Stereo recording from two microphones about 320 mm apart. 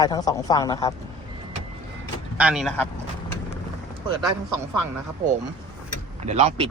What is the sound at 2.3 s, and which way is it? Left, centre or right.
Speech, centre.